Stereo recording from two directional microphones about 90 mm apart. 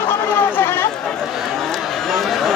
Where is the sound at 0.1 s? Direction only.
25° left (ahead or behind).